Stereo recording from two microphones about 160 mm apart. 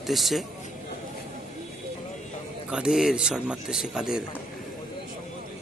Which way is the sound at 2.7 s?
5° right (ahead or behind).